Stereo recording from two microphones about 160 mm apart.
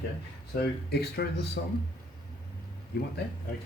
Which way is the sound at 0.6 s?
90° left.